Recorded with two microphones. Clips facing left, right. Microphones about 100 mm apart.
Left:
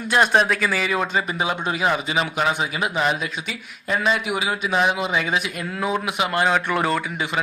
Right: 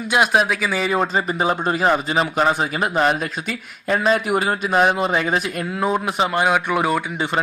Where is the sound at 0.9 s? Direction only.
35° right (ahead or behind).